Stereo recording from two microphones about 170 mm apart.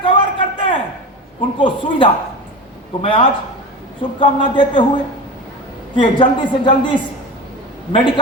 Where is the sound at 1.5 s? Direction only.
30° left (ahead or behind).